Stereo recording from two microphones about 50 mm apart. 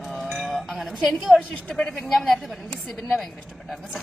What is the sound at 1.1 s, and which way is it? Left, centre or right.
A woman's voice, centre.